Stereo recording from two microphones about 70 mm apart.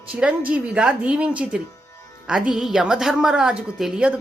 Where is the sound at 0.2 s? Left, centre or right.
Centre.